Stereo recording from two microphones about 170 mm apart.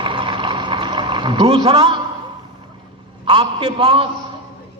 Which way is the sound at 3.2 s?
30° right (ahead or behind).